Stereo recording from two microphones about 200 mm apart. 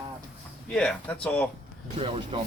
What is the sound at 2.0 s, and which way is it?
Speech, 25° right (ahead or behind).